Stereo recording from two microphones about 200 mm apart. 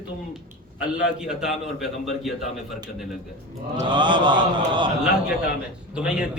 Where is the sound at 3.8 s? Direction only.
25° right (ahead or behind).